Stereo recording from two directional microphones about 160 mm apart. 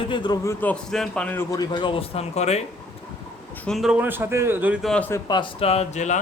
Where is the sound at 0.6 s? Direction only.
5° left (ahead or behind).